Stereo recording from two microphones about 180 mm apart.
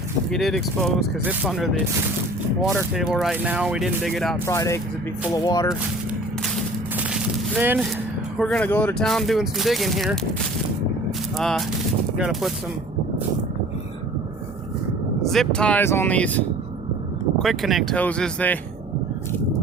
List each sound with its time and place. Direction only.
0.3 s speech: centre (ahead or behind)
4.4 s speech: 15° left (ahead or behind)
6.9 s a sound: 5° right (ahead or behind)
8.4 s speech: 5° left (ahead or behind)
11.3 s speech: centre (ahead or behind)
15.3 s speech: 5° left (ahead or behind)
17.4 s speech: centre (ahead or behind)